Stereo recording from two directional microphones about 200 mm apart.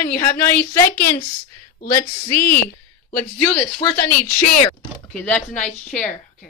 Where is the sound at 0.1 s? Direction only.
10° left (ahead or behind).